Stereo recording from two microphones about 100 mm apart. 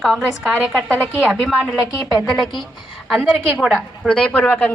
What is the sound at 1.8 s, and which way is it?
Speech, 35° left (ahead or behind).